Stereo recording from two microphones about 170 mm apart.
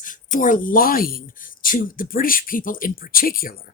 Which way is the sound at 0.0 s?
50° left (ahead or behind).